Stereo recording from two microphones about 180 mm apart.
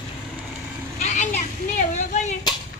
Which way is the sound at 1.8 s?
40° left (ahead or behind).